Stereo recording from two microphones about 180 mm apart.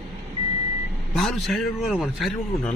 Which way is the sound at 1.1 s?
Centre (ahead or behind).